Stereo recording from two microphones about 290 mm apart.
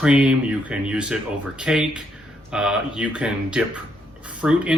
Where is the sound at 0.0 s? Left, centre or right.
Centre.